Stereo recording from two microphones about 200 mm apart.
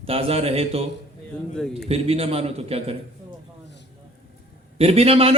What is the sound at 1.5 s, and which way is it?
Speech, 5° left (ahead or behind).